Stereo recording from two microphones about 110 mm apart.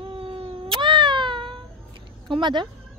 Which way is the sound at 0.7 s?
45° right (ahead or behind).